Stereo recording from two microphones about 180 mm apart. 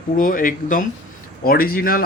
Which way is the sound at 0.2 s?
50° left (ahead or behind).